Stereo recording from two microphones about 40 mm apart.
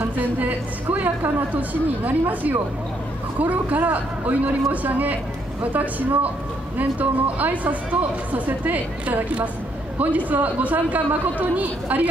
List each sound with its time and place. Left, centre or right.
0.2 s a woman's voice: right
9.0 s a woman's voice: right